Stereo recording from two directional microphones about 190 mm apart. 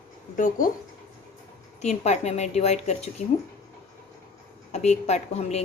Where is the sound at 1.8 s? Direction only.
35° left (ahead or behind).